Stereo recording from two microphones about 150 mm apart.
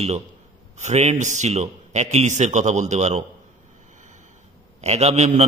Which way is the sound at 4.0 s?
55° right (ahead or behind).